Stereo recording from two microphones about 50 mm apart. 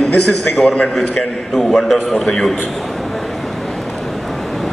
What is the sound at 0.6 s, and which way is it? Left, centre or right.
Speech, left.